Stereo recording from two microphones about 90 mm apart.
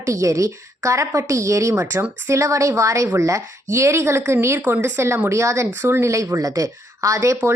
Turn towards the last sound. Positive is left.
turn(degrees=-35)  # may be behind; listen again after turning